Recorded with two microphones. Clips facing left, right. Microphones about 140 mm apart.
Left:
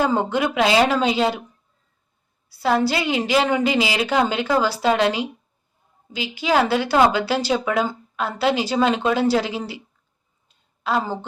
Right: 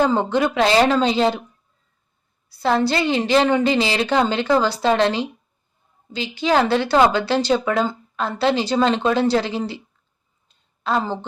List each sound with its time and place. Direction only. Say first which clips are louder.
0.0 s a woman's voice: right 2 dB; 5° left (ahead or behind)
2.6 s a woman's voice: right 1 dB; 5° left (ahead or behind)
10.5 s a sound: right 1 dB; 10° left (ahead or behind)